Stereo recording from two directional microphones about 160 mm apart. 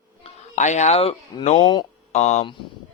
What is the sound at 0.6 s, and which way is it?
Speech, 45° left (ahead or behind).